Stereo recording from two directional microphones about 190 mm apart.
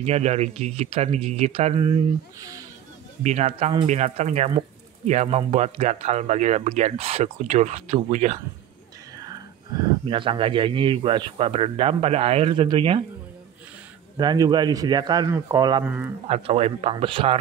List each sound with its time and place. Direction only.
0.0 s speech: 35° right (ahead or behind)
3.3 s speech: 35° right (ahead or behind)
9.1 s whispering: 20° right (ahead or behind)
10.0 s speech: 25° right (ahead or behind)
14.1 s speech: 20° right (ahead or behind)
15.8 s speech: 10° right (ahead or behind)
16.3 s speech: 35° right (ahead or behind)